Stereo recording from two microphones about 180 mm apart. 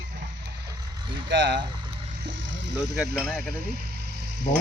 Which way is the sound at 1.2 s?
75° right (ahead or behind).